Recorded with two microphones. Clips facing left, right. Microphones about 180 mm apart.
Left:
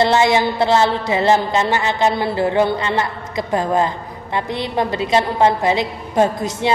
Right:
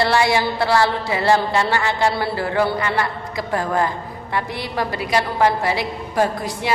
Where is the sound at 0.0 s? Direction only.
20° left (ahead or behind).